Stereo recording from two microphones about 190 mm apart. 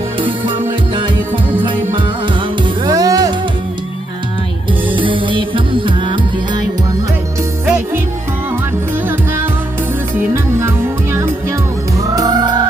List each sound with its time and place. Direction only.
0.2 s music: 25° right (ahead or behind)
4.9 s music: 25° right (ahead or behind)
7.6 s music: 10° right (ahead or behind)
9.0 s music: 10° right (ahead or behind)